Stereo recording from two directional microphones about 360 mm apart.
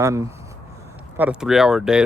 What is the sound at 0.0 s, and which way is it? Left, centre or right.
Speech, centre.